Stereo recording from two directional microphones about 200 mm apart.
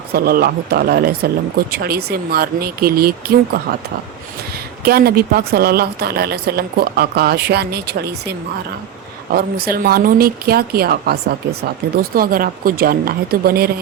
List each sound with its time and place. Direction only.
0.1 s speech: 50° right (ahead or behind)
4.8 s speech: 50° right (ahead or behind)
9.3 s speech: 50° right (ahead or behind)